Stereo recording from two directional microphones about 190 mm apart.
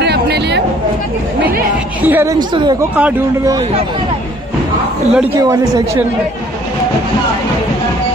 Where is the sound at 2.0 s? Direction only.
15° right (ahead or behind).